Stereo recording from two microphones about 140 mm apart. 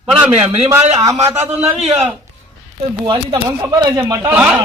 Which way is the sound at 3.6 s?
25° right (ahead or behind).